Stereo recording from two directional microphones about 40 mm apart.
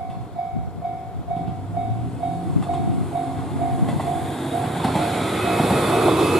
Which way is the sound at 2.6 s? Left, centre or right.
Centre.